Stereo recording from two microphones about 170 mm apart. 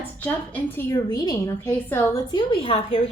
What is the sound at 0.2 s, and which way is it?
A woman's voice, 10° left (ahead or behind).